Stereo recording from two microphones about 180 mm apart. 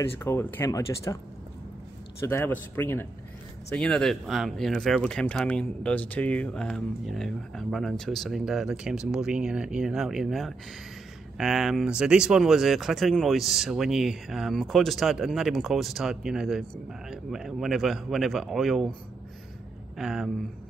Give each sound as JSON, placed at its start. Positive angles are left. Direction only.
{"t": 0.2, "sound": "speech", "side_deg": 10}
{"t": 2.2, "sound": "speech", "side_deg": 15}
{"t": 20.0, "sound": "speech", "side_deg": 0}